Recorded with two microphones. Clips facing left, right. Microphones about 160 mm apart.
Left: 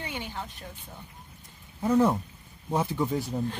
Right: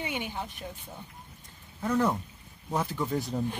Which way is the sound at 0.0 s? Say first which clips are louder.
Right 2 dB; 15° right (ahead or behind).